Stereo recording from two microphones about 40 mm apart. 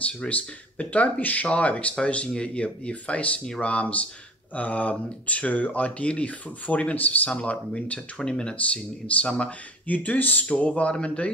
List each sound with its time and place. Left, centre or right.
0.0 s speech: left
8.2 s speech: centre
9.8 s speech: left
10.8 s speech: left